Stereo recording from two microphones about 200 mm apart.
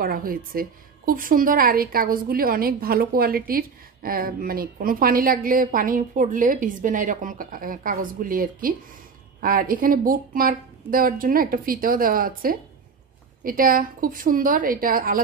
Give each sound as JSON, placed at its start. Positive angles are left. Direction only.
{"t": 0.0, "sound": "a woman's voice", "side_deg": -45}